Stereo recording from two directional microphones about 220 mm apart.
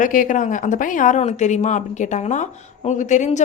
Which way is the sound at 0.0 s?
35° left (ahead or behind).